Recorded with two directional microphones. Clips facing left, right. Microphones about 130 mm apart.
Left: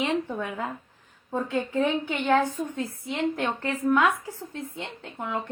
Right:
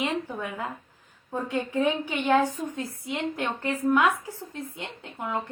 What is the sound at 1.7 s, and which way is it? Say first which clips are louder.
A woman's voice: right 1 dB; 15° right (ahead or behind).